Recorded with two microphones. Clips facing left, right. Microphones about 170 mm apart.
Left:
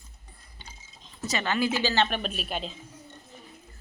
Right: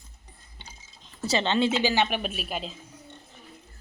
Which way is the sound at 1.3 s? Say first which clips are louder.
Right 3 dB; 25° right (ahead or behind).